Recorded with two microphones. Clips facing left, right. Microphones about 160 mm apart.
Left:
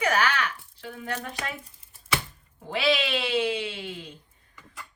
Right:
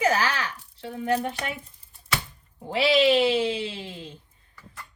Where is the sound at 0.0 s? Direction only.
30° right (ahead or behind).